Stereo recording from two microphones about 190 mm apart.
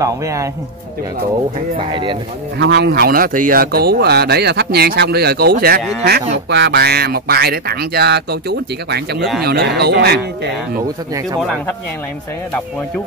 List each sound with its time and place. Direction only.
0.0 s a man's voice: 15° right (ahead or behind)
1.8 s speech: 25° right (ahead or behind)
2.6 s speech: 60° right (ahead or behind)